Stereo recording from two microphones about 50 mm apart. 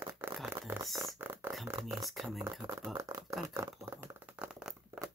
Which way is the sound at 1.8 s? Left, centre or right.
Centre.